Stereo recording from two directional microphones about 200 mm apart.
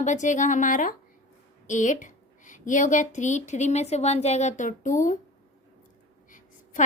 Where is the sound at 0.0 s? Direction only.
40° left (ahead or behind).